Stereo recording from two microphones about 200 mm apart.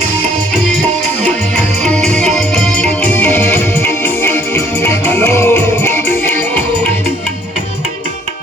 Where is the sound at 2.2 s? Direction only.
Centre (ahead or behind).